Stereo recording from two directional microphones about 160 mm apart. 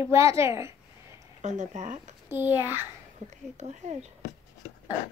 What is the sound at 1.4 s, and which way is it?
Speech, 45° right (ahead or behind).